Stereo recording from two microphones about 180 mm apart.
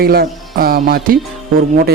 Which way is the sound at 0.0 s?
55° right (ahead or behind).